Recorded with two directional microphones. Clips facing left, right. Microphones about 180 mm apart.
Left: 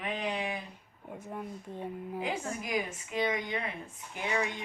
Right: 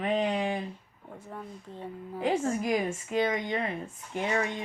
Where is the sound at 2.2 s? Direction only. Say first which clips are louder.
Right 10 dB; 35° right (ahead or behind).